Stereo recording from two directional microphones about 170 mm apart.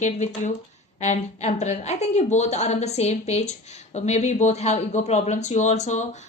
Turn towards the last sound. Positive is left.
turn(degrees=45)  # may be behind; listen again after turning